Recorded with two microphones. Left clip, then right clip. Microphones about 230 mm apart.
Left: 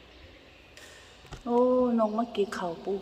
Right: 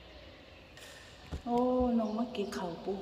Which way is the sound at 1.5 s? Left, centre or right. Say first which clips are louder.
Left 6 dB; centre.